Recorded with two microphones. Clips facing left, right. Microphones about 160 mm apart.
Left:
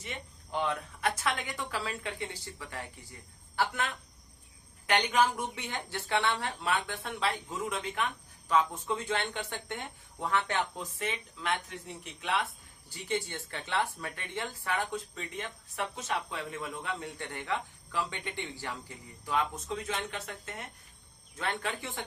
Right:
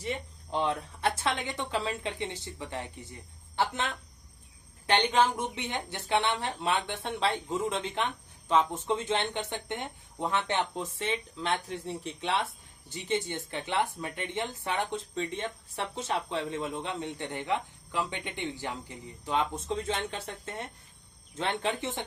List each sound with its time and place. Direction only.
0.0 s a woman's voice: 30° right (ahead or behind)